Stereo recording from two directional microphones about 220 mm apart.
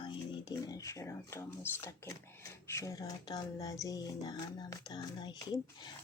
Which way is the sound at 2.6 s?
15° left (ahead or behind).